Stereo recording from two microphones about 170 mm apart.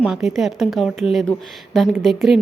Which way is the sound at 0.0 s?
5° right (ahead or behind).